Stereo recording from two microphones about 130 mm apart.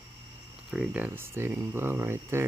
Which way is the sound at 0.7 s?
5° right (ahead or behind).